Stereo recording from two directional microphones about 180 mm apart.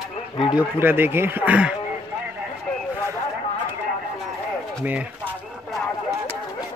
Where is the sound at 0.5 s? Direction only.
10° right (ahead or behind).